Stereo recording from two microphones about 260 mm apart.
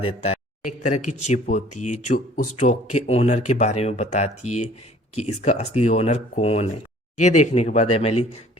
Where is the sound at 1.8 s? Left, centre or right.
Left.